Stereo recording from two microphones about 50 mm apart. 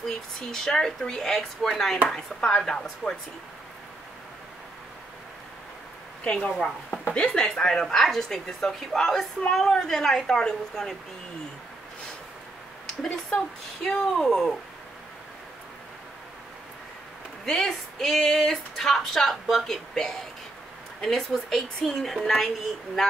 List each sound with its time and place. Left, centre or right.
0.0 s speech: centre
6.2 s speech: left
12.8 s speech: centre
17.5 s speech: centre